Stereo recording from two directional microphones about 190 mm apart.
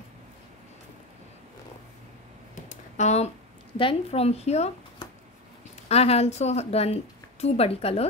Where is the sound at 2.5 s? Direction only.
35° left (ahead or behind).